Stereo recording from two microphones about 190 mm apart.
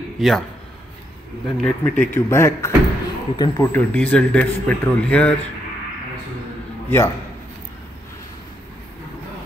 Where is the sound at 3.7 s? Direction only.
10° left (ahead or behind).